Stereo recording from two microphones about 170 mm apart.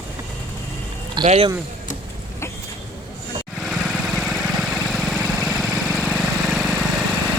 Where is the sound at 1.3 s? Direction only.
35° right (ahead or behind).